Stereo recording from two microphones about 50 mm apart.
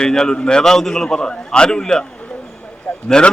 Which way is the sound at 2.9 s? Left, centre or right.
Left.